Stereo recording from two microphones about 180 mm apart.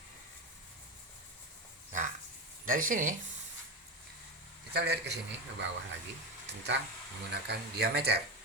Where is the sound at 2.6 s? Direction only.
50° right (ahead or behind).